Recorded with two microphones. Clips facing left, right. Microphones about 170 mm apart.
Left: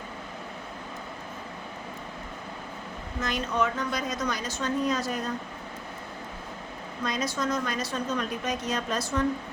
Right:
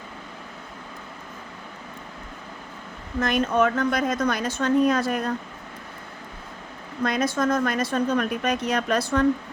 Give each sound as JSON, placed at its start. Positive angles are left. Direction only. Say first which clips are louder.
{"t": 3.2, "sound": "a woman's voice", "louder": "right 7 dB", "side_deg": -55}
{"t": 7.0, "sound": "a woman's voice", "louder": "right 6 dB", "side_deg": -60}